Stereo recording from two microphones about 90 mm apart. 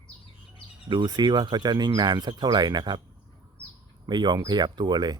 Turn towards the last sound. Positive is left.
turn(degrees=-50)  # may be behind; listen again after turning